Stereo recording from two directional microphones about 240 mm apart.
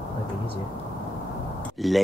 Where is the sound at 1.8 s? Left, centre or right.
Centre.